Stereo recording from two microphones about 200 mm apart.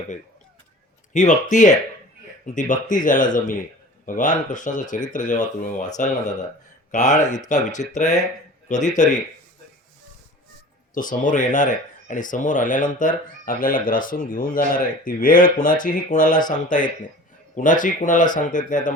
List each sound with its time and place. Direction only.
1.1 s speech: 35° left (ahead or behind)
6.9 s speech: 35° left (ahead or behind)
10.9 s speech: 40° left (ahead or behind)